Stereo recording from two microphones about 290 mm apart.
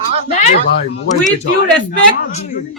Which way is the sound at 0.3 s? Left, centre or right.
Left.